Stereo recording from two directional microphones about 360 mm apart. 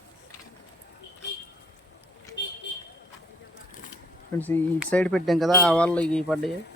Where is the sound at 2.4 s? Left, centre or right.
Left.